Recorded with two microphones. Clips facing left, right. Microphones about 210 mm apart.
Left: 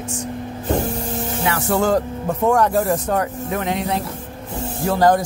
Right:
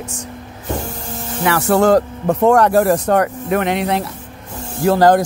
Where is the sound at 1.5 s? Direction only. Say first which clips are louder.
Right 6 dB; 70° right (ahead or behind).